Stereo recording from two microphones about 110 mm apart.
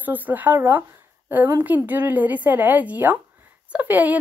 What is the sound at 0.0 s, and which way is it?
A woman's voice, 15° right (ahead or behind).